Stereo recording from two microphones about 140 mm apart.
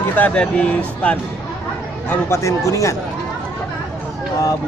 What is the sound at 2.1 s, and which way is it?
Speech, 20° left (ahead or behind).